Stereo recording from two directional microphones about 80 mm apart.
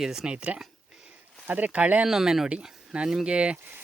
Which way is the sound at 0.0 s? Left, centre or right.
Centre.